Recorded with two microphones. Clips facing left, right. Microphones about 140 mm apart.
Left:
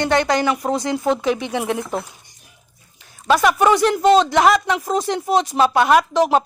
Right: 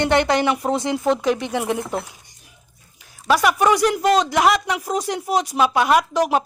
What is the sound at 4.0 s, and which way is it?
Speech, 30° left (ahead or behind).